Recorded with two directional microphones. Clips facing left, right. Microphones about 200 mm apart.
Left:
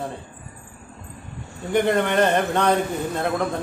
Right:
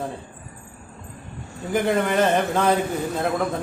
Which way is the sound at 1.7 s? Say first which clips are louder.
Left 1 dB; centre (ahead or behind).